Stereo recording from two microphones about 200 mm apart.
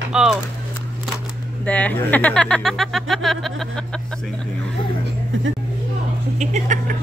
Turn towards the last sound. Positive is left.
turn(degrees=-40)  # may be behind; listen again after turning